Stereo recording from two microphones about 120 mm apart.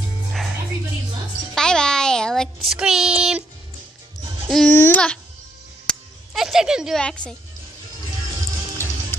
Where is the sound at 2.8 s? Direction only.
5° right (ahead or behind).